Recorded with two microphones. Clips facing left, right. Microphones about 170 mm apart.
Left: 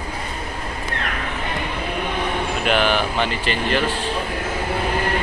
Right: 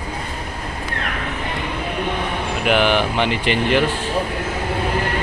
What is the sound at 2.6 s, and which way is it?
Speech, 15° right (ahead or behind).